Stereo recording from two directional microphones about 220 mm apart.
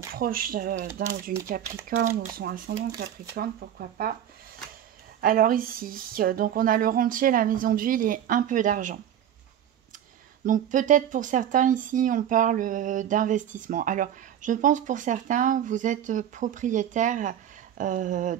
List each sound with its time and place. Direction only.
0.1 s speech: 40° right (ahead or behind)
2.3 s speech: 40° right (ahead or behind)
5.2 s speech: 40° right (ahead or behind)
10.4 s speech: 35° right (ahead or behind)